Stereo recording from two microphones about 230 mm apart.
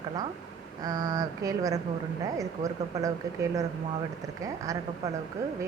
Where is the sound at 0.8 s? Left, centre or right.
Centre.